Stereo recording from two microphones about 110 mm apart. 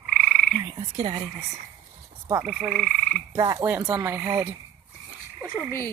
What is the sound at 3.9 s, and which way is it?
Speech, 30° right (ahead or behind).